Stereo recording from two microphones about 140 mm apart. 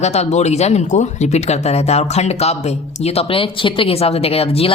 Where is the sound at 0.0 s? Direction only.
50° left (ahead or behind).